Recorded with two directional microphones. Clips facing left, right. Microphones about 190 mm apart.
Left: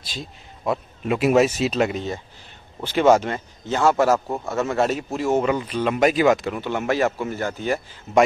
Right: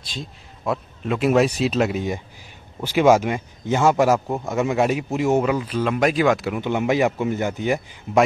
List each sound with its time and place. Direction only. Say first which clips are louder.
0.1 s speech: right 1 dB; centre (ahead or behind); by 5.4 s 15° right (ahead or behind)
5.4 s speech: even; centre (ahead or behind)
6.6 s speech: right 2 dB; 15° right (ahead or behind)